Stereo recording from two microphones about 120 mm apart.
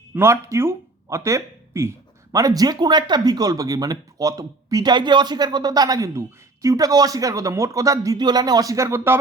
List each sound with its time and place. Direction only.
0.1 s speech: 20° right (ahead or behind)